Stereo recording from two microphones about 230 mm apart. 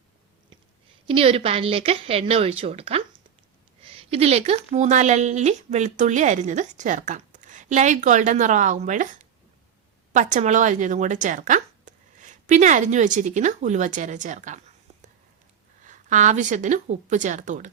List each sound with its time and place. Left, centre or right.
1.0 s a woman's voice: right
15.8 s speech: right